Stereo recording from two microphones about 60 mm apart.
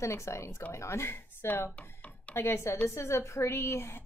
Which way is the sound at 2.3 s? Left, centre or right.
Left.